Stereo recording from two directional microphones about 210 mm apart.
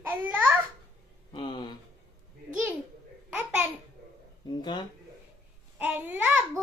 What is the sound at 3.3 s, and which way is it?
Babbling, 5° right (ahead or behind).